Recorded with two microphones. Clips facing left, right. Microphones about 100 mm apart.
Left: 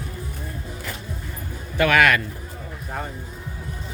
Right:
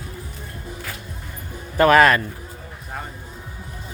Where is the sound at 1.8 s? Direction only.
35° right (ahead or behind).